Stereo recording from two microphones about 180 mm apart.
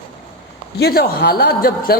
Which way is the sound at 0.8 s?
65° left (ahead or behind).